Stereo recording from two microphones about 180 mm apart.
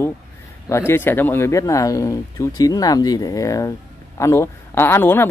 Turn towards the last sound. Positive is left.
turn(degrees=10)  # may be behind; listen again after turning